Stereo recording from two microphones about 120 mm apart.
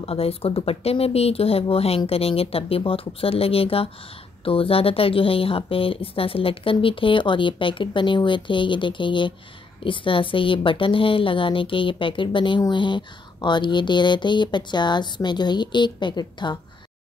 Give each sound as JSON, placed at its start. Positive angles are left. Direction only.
{"t": 0.0, "sound": "a woman's voice", "side_deg": 55}